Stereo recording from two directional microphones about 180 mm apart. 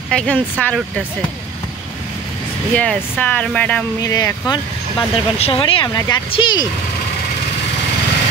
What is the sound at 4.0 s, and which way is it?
Speech, 20° left (ahead or behind).